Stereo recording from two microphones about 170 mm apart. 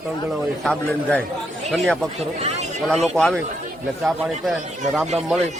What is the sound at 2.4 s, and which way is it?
Speech, 40° right (ahead or behind).